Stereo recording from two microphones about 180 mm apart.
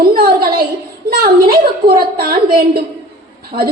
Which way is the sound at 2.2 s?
55° right (ahead or behind).